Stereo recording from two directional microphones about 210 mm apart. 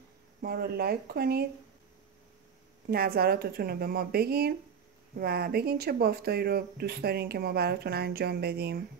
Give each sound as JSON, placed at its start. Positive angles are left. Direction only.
{"t": 0.4, "sound": "speech", "side_deg": -45}
{"t": 2.9, "sound": "speech", "side_deg": -45}